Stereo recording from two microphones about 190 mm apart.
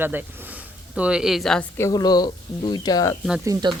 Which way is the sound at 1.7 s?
15° left (ahead or behind).